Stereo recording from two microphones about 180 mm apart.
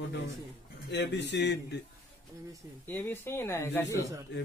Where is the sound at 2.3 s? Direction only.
20° right (ahead or behind).